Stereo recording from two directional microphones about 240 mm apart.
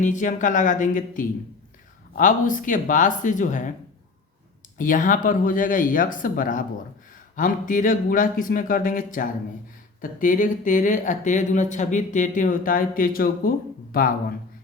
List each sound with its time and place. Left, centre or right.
0.0 s speech: left
4.8 s speech: left